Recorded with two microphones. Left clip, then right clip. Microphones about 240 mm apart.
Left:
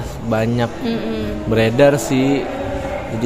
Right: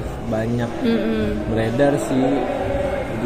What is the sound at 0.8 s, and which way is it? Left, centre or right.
Speech, centre.